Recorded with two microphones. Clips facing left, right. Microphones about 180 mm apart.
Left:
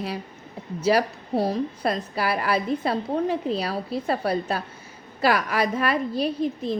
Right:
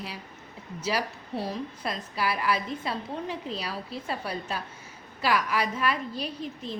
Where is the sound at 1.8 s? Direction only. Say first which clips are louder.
Left 4 dB; 55° left (ahead or behind).